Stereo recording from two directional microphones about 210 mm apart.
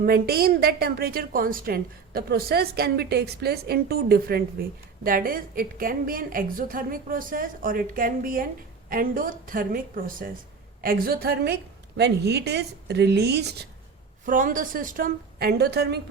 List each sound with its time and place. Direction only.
0.0 s a woman's voice: 45° right (ahead or behind)
14.3 s a woman's voice: 40° right (ahead or behind)